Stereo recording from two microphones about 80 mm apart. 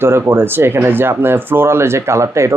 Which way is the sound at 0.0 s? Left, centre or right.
Right.